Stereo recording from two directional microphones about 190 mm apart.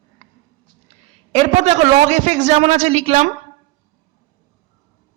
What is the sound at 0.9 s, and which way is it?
A man's voice, 35° right (ahead or behind).